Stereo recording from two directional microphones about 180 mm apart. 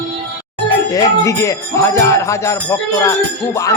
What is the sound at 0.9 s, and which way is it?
Speech, 20° left (ahead or behind).